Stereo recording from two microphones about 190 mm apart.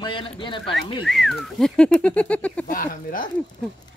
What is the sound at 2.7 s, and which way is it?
Speech, 45° left (ahead or behind).